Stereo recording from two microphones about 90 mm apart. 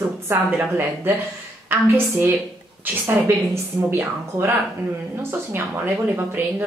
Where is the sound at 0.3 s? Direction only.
25° right (ahead or behind).